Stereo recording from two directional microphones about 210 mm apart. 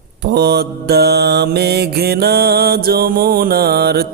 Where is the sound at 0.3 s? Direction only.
50° right (ahead or behind).